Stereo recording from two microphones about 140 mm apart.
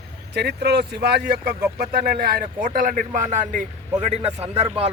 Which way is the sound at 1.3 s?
90° right.